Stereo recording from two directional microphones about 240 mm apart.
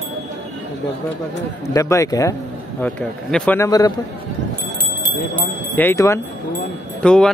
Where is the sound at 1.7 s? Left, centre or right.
Centre.